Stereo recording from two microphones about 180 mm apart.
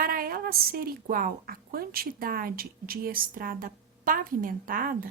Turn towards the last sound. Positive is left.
turn(degrees=-50)  # may be behind; listen again after turning